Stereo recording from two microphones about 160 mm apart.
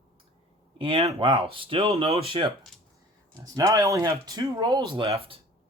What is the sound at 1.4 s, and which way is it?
Speech, 35° right (ahead or behind).